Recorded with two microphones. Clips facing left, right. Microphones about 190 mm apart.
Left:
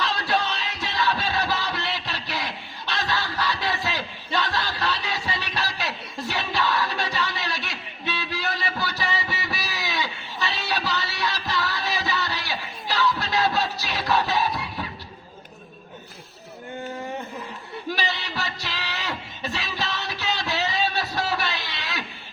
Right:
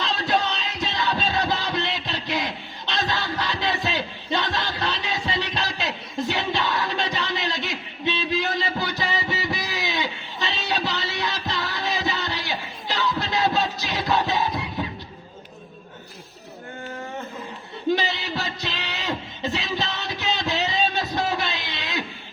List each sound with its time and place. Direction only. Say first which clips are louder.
0.0 s music: right 1 dB; 20° right (ahead or behind)
17.8 s music: right 6 dB; 20° right (ahead or behind)